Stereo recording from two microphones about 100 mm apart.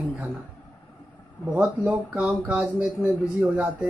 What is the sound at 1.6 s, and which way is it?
Speech, 15° right (ahead or behind).